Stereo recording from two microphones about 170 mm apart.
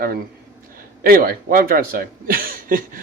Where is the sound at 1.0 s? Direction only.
60° right (ahead or behind).